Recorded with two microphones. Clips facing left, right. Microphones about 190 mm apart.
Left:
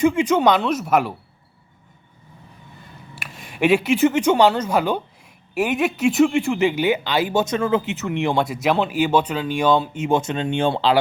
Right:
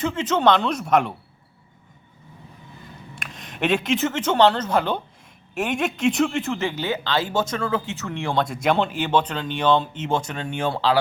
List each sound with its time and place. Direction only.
0.0 s speech: 15° left (ahead or behind)
3.2 s speech: 5° left (ahead or behind)
8.4 s speech: 5° left (ahead or behind)
10.2 s speech: 20° left (ahead or behind)